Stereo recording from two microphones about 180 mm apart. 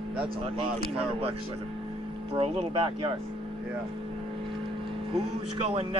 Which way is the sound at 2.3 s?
30° right (ahead or behind).